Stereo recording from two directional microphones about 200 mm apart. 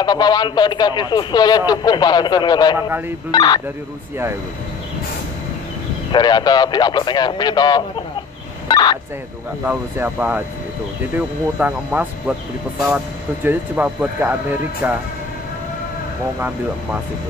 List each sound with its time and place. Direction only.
0.0 s a man's voice: 20° left (ahead or behind)
6.1 s a man's voice: 20° left (ahead or behind)
8.6 s a sound: 20° left (ahead or behind)
9.7 s speech: 10° right (ahead or behind)